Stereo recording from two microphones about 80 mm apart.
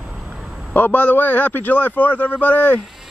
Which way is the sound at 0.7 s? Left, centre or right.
Left.